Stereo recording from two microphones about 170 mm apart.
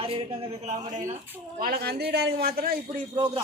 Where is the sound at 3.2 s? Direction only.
25° right (ahead or behind).